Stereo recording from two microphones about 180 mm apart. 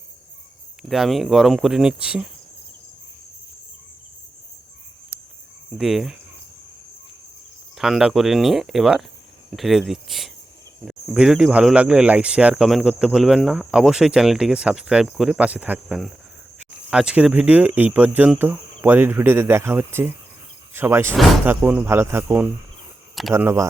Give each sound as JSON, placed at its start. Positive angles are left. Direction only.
{"t": 0.8, "sound": "speech", "side_deg": 0}
{"t": 5.7, "sound": "speech", "side_deg": 0}
{"t": 7.8, "sound": "speech", "side_deg": 0}